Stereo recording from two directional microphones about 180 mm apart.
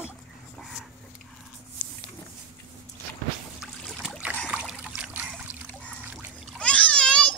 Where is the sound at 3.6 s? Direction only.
Centre (ahead or behind).